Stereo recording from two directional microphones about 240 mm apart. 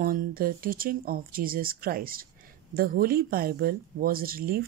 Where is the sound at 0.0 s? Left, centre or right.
Right.